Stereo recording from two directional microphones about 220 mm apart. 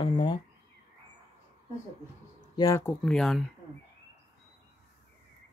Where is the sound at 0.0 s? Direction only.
20° left (ahead or behind).